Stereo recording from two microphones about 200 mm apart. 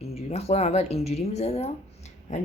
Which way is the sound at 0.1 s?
30° left (ahead or behind).